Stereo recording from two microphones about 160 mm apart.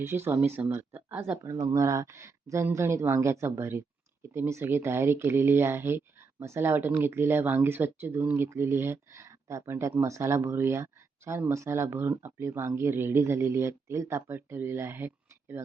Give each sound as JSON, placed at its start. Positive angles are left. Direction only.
{"t": 0.0, "sound": "speech", "side_deg": -15}
{"t": 1.5, "sound": "speech", "side_deg": -25}